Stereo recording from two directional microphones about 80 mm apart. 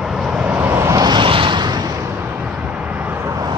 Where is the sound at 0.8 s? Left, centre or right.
Right.